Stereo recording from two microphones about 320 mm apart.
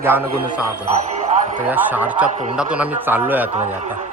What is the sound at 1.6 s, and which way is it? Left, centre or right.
Speech, centre.